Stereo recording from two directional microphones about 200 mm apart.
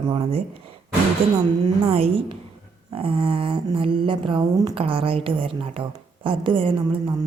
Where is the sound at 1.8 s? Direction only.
30° right (ahead or behind).